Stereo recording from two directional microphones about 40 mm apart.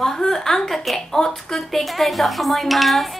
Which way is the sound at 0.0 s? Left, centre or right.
Centre.